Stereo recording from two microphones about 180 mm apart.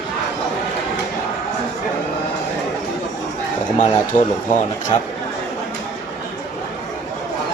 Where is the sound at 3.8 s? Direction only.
45° left (ahead or behind).